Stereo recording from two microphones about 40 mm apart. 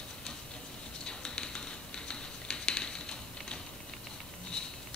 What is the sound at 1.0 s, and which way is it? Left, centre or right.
Bird, left.